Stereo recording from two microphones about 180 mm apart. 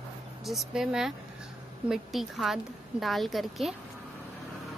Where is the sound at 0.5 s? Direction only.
Centre (ahead or behind).